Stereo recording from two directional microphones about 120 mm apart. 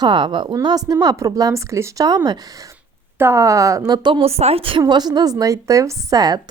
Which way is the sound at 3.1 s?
25° right (ahead or behind).